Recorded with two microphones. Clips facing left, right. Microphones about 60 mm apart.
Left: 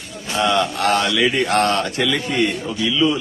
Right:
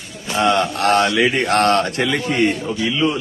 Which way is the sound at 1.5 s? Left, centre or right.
Right.